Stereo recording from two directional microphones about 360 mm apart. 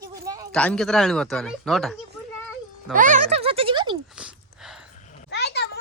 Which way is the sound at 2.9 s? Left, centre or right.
Right.